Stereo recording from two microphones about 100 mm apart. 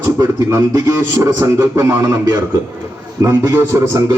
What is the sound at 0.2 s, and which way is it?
A man's voice, 30° right (ahead or behind).